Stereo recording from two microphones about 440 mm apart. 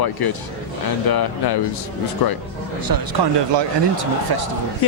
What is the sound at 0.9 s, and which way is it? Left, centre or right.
Speech, left.